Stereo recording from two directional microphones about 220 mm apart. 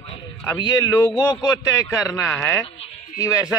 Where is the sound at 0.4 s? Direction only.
15° left (ahead or behind).